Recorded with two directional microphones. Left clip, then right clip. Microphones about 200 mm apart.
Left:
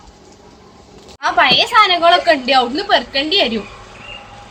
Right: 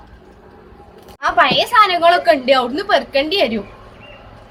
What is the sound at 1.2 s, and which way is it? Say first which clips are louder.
A woman's voice: left 1 dB; 15° right (ahead or behind).